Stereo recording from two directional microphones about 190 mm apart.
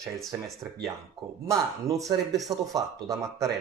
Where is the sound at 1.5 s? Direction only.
15° right (ahead or behind).